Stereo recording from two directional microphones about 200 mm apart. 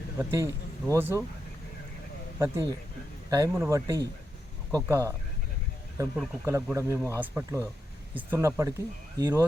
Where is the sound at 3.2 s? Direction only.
15° right (ahead or behind).